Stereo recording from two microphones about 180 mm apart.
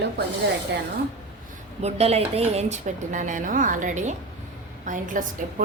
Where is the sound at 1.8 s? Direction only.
35° right (ahead or behind).